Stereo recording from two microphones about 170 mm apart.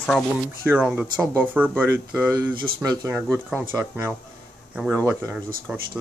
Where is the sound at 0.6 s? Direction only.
10° right (ahead or behind).